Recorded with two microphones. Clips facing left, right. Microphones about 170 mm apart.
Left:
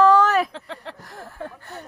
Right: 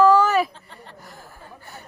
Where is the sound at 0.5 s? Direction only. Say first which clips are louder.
Left 9 dB; 80° left.